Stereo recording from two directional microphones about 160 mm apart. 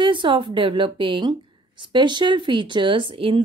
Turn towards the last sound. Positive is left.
turn(degrees=-35)  # may be behind; listen again after turning